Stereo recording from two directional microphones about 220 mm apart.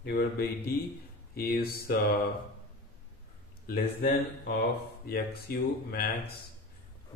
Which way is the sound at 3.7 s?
45° left (ahead or behind).